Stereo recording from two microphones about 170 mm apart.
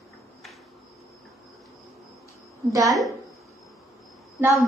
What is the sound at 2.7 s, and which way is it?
Speech, 20° right (ahead or behind).